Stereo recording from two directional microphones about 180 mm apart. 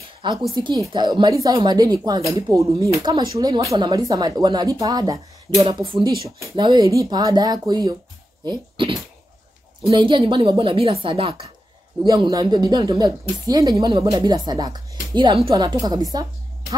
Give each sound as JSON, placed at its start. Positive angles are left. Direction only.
{"t": 0.2, "sound": "speech", "side_deg": -25}